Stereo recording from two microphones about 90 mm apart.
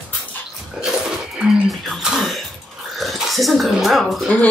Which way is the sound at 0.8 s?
5° right (ahead or behind).